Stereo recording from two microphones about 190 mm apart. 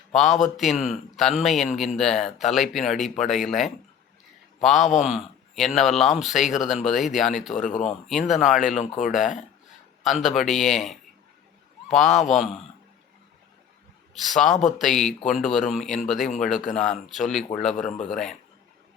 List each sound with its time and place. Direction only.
0.1 s a man's voice: centre (ahead or behind)
7.5 s speech: 40° left (ahead or behind)
8.0 s speech: centre (ahead or behind)
8.6 s speech: 40° left (ahead or behind)
10.0 s speech: centre (ahead or behind)
14.1 s speech: centre (ahead or behind)
17.7 s speech: 40° left (ahead or behind)
18.1 s speech: centre (ahead or behind)